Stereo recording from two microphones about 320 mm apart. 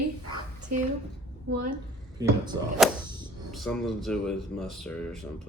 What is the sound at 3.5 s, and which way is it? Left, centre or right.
A man's voice, centre.